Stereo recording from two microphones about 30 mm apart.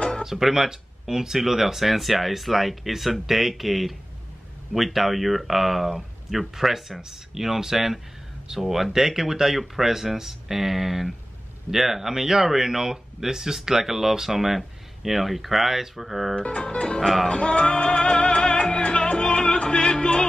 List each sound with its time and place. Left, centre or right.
0.2 s speech: centre
16.3 s speech: left
17.3 s music: left